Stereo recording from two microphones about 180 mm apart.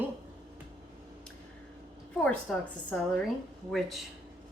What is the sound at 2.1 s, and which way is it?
A woman's voice, 5° left (ahead or behind).